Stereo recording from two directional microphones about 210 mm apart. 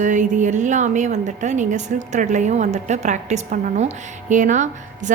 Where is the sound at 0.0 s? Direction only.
35° right (ahead or behind).